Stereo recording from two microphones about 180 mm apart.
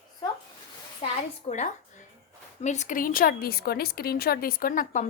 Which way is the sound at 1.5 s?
35° left (ahead or behind).